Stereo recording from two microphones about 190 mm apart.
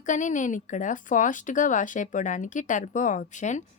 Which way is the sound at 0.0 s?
40° left (ahead or behind).